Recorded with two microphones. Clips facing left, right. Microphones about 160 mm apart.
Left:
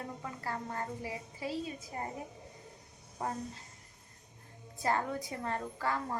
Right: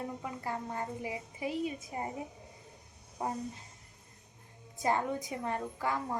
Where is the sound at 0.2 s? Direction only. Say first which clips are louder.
Right 2 dB; 15° right (ahead or behind).